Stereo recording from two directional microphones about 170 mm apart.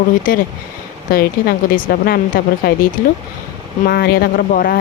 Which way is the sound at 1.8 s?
60° left (ahead or behind).